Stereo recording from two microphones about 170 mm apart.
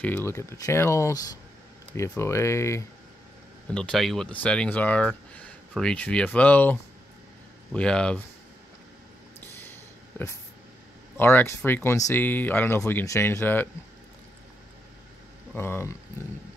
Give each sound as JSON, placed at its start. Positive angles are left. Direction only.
{"t": 0.0, "sound": "speech", "side_deg": 10}
{"t": 3.7, "sound": "speech", "side_deg": 5}
{"t": 9.6, "sound": "a sound", "side_deg": 10}
{"t": 11.1, "sound": "speech", "side_deg": 15}
{"t": 15.5, "sound": "speech", "side_deg": 15}